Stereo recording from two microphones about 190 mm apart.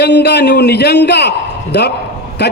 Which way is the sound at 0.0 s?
60° left (ahead or behind).